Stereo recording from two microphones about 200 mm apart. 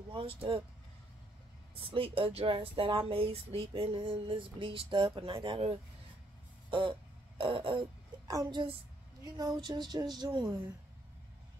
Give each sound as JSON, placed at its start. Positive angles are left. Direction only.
{"t": 0.1, "sound": "speech", "side_deg": -30}
{"t": 1.8, "sound": "speech", "side_deg": -25}
{"t": 6.7, "sound": "a sound", "side_deg": -25}
{"t": 8.3, "sound": "speech", "side_deg": -20}